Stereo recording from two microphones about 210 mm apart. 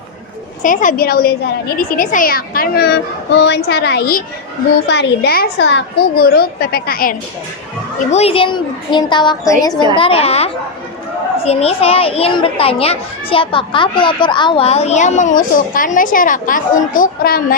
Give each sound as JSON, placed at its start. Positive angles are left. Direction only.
{"t": 0.6, "sound": "a woman's voice", "side_deg": 40}
{"t": 8.1, "sound": "a child's voice", "side_deg": 30}